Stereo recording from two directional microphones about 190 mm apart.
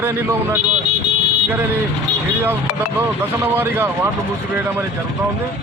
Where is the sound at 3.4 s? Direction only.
10° right (ahead or behind).